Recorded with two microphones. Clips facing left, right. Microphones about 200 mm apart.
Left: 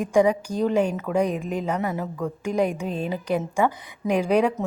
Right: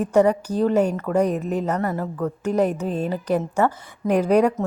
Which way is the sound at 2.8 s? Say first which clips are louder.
Right 3 dB; 40° right (ahead or behind).